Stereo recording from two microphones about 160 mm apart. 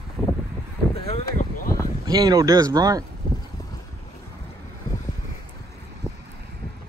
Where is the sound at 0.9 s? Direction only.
40° left (ahead or behind).